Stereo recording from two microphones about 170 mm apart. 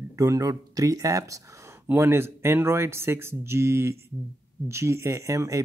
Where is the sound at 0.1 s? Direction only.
20° right (ahead or behind).